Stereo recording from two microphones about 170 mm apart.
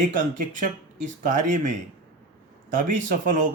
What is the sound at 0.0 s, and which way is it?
Speech, 45° right (ahead or behind).